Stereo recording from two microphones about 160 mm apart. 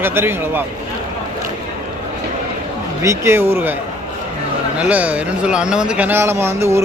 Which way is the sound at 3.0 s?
15° right (ahead or behind).